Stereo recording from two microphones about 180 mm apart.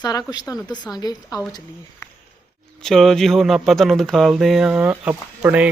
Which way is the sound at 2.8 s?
Centre (ahead or behind).